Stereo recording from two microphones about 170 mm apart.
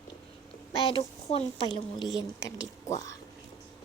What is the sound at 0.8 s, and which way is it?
A child's voice, 35° left (ahead or behind).